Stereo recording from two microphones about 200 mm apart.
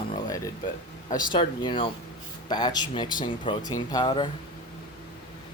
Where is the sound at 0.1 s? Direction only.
15° left (ahead or behind).